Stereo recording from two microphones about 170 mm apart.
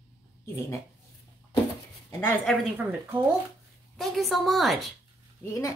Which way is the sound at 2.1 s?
15° left (ahead or behind).